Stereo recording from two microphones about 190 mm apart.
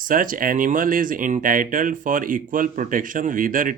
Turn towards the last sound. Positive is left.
turn(degrees=-45)  # may be behind; listen again after turning